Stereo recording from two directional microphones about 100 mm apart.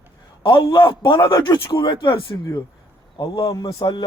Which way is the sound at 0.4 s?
45° left (ahead or behind).